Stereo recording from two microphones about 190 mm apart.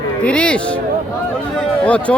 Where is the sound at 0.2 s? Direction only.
5° left (ahead or behind).